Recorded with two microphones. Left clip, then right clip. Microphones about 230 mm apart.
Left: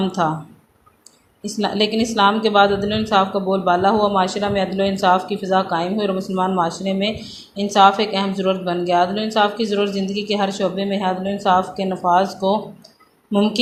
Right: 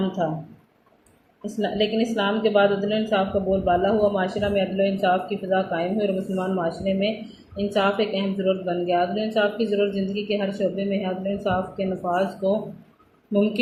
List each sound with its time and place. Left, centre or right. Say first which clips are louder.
1.5 s speech: left 4 dB; left